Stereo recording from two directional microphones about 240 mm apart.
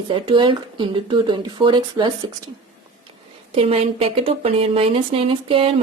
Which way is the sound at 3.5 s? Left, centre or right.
Right.